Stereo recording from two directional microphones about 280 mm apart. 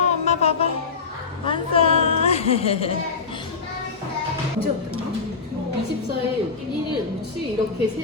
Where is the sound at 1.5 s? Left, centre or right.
Centre.